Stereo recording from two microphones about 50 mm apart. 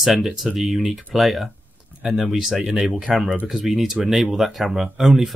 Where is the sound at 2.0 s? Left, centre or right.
Centre.